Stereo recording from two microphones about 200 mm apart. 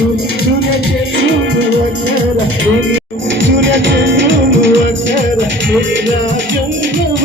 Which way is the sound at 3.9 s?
65° right (ahead or behind).